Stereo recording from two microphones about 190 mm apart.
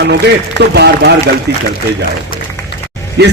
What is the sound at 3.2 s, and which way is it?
Speech, 60° right (ahead or behind).